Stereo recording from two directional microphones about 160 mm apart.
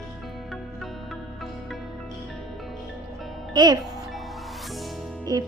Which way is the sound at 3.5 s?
25° right (ahead or behind).